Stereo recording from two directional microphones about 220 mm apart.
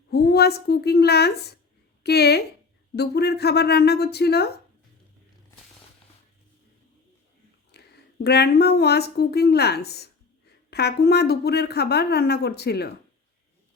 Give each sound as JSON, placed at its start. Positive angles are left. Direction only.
{"t": 0.1, "sound": "a woman's voice", "side_deg": 45}
{"t": 7.7, "sound": "a sound", "side_deg": 50}
{"t": 8.2, "sound": "a woman's voice", "side_deg": 50}